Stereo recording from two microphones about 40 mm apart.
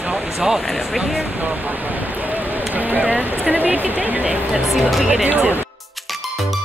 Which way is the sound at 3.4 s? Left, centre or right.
Right.